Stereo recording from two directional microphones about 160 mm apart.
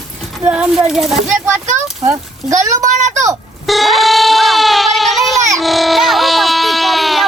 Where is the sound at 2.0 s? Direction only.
20° right (ahead or behind).